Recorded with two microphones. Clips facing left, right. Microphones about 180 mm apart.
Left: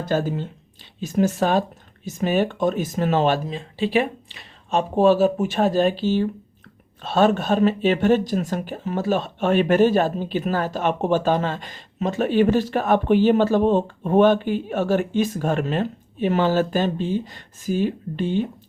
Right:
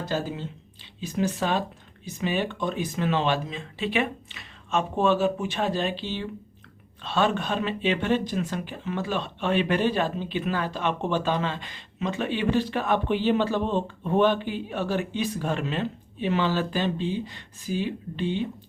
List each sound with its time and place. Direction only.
0.0 s speech: 50° left (ahead or behind)